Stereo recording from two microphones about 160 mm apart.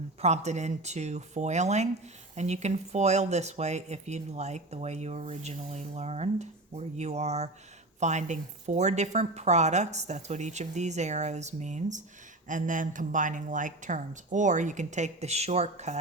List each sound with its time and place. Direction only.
0.2 s speech: 45° right (ahead or behind)